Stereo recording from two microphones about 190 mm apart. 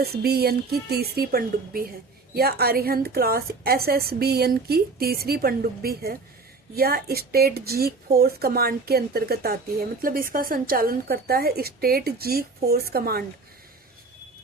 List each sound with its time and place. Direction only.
0.0 s a woman's voice: 55° right (ahead or behind)